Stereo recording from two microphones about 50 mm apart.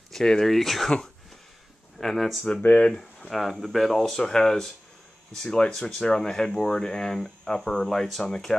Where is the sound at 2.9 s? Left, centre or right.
Centre.